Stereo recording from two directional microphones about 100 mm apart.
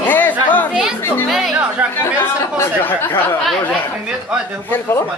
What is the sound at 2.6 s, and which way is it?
Speech, 20° left (ahead or behind).